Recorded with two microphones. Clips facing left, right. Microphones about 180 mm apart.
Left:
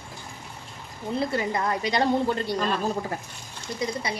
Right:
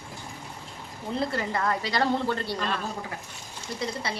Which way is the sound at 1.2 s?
15° left (ahead or behind).